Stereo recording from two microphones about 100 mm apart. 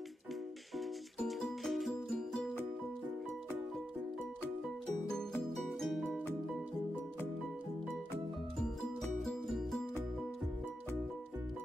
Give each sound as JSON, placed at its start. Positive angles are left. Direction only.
{"t": 0.7, "sound": "music", "side_deg": 0}
{"t": 5.6, "sound": "music", "side_deg": 0}
{"t": 8.5, "sound": "music", "side_deg": 5}